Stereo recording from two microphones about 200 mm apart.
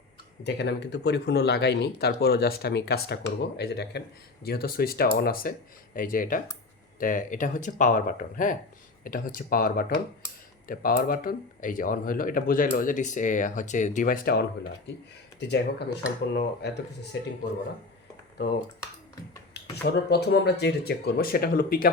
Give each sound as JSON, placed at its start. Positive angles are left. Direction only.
{"t": 0.4, "sound": "speech", "side_deg": 60}
{"t": 15.4, "sound": "speech", "side_deg": 60}
{"t": 19.7, "sound": "speech", "side_deg": 55}